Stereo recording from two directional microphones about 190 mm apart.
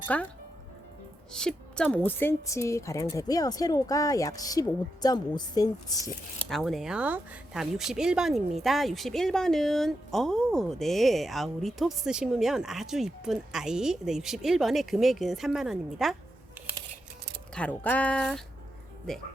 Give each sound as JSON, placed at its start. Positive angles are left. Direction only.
{"t": 0.1, "sound": "a woman's voice", "side_deg": 5}
{"t": 1.3, "sound": "a woman's voice", "side_deg": 5}
{"t": 6.5, "sound": "speech", "side_deg": 0}
{"t": 17.5, "sound": "a woman's voice", "side_deg": 5}